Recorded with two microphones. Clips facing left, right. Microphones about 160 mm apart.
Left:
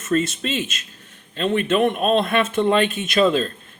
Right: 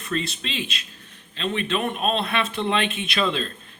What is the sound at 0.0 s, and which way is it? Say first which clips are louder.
Speech: left 7 dB; 45° left (ahead or behind).